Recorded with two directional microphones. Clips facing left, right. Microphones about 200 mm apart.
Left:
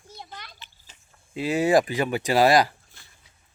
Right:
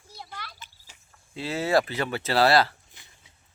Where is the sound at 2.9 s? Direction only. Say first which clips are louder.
Even; 20° right (ahead or behind).